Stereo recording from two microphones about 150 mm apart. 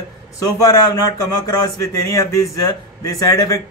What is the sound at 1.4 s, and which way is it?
A man's voice, 20° left (ahead or behind).